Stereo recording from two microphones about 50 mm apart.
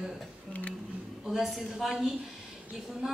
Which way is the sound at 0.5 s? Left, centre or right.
Left.